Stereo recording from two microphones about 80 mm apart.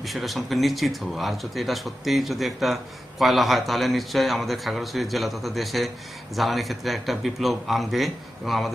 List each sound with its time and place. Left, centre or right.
0.0 s speech: centre